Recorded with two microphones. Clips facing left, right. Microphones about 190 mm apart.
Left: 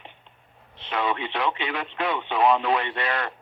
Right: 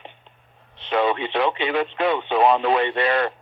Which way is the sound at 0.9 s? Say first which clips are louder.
Right 6 dB; 30° right (ahead or behind).